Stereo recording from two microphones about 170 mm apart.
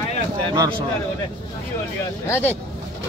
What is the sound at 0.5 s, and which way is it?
Speech, 30° right (ahead or behind).